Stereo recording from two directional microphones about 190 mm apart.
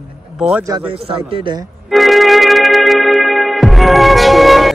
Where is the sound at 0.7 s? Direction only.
25° right (ahead or behind).